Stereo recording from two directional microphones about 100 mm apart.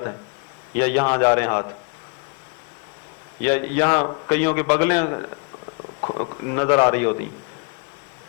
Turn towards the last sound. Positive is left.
turn(degrees=30)  # may be behind; listen again after turning